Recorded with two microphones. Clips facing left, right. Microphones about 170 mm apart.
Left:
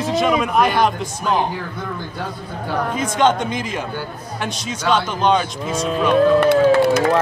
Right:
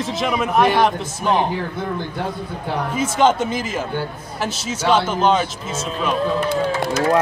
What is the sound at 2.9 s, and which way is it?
Speech, 5° right (ahead or behind).